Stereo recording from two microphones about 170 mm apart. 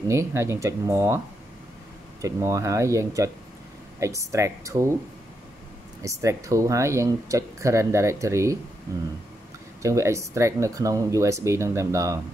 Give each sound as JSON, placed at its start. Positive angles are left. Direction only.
{"t": 0.1, "sound": "speech", "side_deg": -15}
{"t": 2.2, "sound": "speech", "side_deg": -20}
{"t": 6.0, "sound": "speech", "side_deg": -20}
{"t": 9.8, "sound": "speech", "side_deg": -15}